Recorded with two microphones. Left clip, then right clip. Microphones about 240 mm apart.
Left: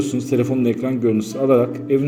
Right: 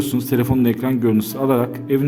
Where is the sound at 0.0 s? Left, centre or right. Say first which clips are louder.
Left 1 dB; right.